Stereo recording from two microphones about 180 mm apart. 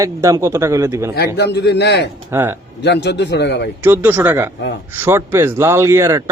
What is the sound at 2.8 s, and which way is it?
Speech, 70° left (ahead or behind).